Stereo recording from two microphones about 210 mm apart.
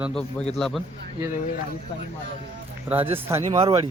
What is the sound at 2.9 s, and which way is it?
Speech, 10° right (ahead or behind).